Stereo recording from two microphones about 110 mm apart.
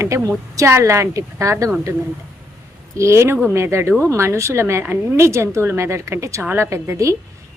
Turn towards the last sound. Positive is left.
turn(degrees=-25)  # may be behind; listen again after turning